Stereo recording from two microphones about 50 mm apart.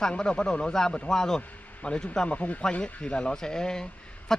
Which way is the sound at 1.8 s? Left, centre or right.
Left.